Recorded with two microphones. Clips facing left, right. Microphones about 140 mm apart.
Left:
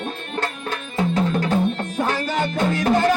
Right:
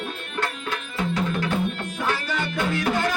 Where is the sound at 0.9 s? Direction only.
40° left (ahead or behind).